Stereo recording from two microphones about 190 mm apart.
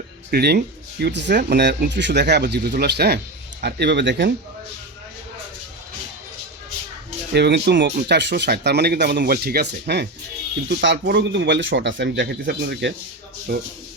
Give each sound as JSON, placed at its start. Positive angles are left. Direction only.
{"t": 0.3, "sound": "speech", "side_deg": -55}
{"t": 7.3, "sound": "speech", "side_deg": -60}